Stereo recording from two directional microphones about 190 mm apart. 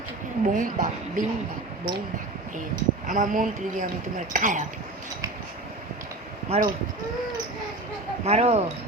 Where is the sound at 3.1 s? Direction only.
45° right (ahead or behind).